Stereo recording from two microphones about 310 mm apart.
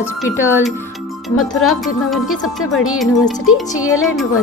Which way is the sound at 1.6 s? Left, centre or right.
Centre.